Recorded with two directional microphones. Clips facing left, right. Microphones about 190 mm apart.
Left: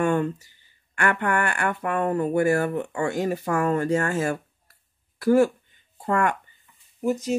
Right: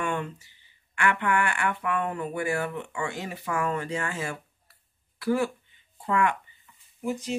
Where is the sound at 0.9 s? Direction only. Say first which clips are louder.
Left 2 dB; 45° left (ahead or behind).